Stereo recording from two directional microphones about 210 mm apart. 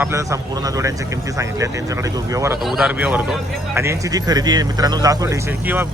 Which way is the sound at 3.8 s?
15° right (ahead or behind).